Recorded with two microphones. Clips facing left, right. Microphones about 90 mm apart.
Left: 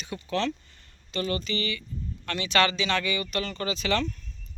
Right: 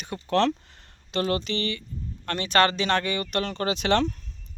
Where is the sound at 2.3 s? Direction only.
45° right (ahead or behind); by 4.1 s 65° right (ahead or behind).